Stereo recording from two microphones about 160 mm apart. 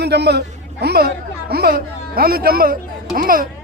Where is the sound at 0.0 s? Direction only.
90° right.